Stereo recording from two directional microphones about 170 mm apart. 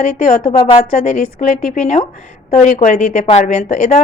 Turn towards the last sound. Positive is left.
turn(degrees=45)  # may be behind; listen again after turning